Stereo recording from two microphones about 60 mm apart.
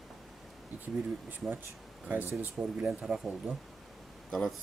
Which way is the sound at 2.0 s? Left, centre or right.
Right.